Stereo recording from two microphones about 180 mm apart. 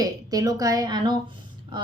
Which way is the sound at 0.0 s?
20° right (ahead or behind).